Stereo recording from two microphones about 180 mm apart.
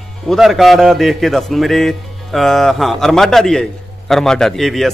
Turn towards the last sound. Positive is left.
turn(degrees=0)  # may be behind; listen again after turning